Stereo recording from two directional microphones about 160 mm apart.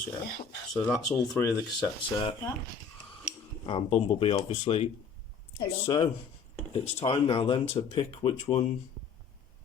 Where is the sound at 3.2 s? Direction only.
35° left (ahead or behind).